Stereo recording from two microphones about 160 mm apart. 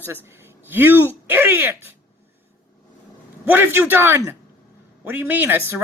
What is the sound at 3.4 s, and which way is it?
Speech, 15° right (ahead or behind).